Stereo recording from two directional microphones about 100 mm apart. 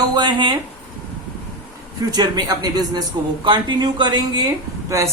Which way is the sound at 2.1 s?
40° right (ahead or behind).